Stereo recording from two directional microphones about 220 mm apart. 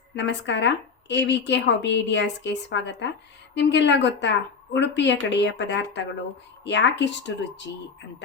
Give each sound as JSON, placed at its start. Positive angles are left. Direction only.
{"t": 0.2, "sound": "speech", "side_deg": 55}